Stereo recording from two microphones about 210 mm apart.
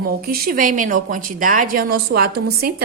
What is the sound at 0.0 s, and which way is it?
A woman's voice, 45° right (ahead or behind).